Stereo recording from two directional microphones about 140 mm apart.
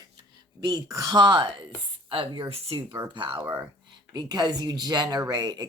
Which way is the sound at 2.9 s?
25° right (ahead or behind).